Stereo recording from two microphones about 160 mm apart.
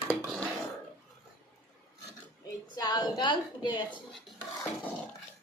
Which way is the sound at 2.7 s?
25° left (ahead or behind).